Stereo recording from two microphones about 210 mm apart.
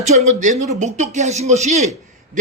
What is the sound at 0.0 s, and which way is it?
Speech, 30° right (ahead or behind).